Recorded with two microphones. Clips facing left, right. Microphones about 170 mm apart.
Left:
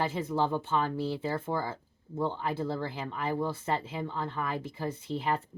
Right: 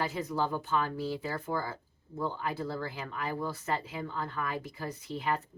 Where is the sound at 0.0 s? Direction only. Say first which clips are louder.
Left 3 dB; 25° left (ahead or behind).